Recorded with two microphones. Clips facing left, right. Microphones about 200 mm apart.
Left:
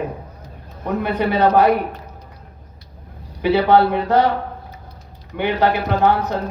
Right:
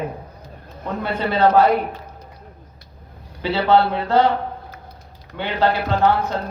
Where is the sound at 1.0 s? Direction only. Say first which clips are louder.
Left 1 dB; 15° left (ahead or behind).